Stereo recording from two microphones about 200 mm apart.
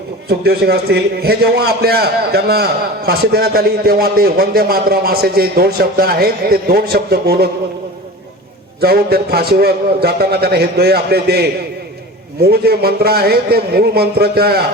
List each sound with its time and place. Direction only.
0.3 s a man's voice: 50° right (ahead or behind)
8.8 s a man's voice: 50° right (ahead or behind)